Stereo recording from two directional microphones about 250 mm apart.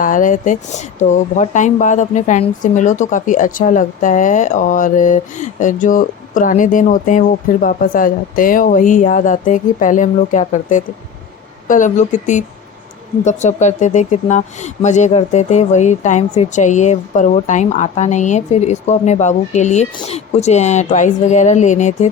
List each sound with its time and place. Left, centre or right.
0.0 s speech: left